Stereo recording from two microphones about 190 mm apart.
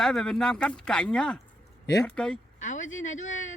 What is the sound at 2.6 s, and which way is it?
Speech, 40° left (ahead or behind).